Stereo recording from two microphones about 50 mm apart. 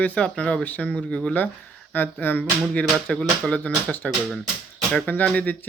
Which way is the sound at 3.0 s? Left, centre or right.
Centre.